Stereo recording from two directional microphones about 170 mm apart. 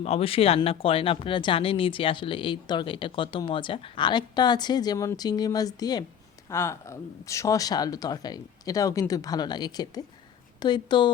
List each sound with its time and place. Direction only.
0.0 s speech: 35° left (ahead or behind)